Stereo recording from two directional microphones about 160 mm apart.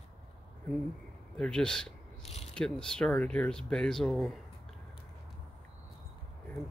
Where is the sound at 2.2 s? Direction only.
40° left (ahead or behind).